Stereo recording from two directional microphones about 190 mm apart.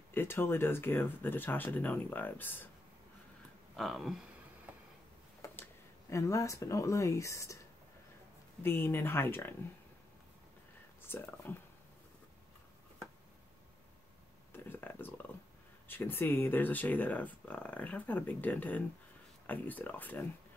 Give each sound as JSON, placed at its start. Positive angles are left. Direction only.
{"t": 0.1, "sound": "speech", "side_deg": 10}
{"t": 3.7, "sound": "speech", "side_deg": 0}
{"t": 5.4, "sound": "speech", "side_deg": 15}
{"t": 8.6, "sound": "speech", "side_deg": 10}
{"t": 11.1, "sound": "speech", "side_deg": 10}
{"t": 14.5, "sound": "a sound", "side_deg": 10}
{"t": 15.9, "sound": "speech", "side_deg": 10}